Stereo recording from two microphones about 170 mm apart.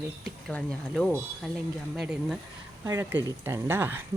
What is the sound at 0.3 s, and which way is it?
Speech, 5° left (ahead or behind).